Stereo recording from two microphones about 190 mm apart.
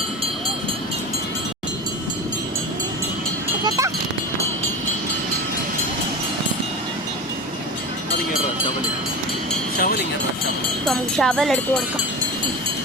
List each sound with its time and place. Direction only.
3.6 s speech: 20° right (ahead or behind)
9.8 s a sound: 55° left (ahead or behind)
10.8 s speech: centre (ahead or behind)